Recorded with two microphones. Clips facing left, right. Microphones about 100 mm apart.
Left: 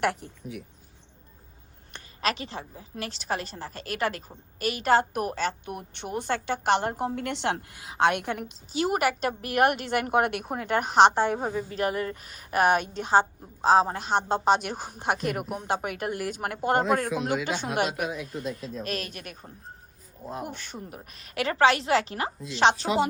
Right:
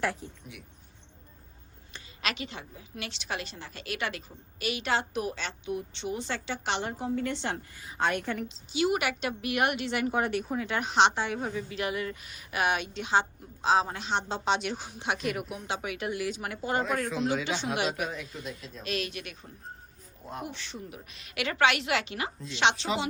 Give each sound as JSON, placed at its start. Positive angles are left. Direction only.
{"t": 0.0, "sound": "a woman's voice", "side_deg": 70}
{"t": 2.2, "sound": "a woman's voice", "side_deg": 35}
{"t": 7.2, "sound": "a woman's voice", "side_deg": 75}
{"t": 8.7, "sound": "a woman's voice", "side_deg": 40}
{"t": 17.4, "sound": "a woman's voice", "side_deg": 45}